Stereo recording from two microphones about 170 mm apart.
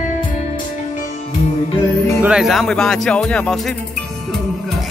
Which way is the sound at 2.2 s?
5° right (ahead or behind).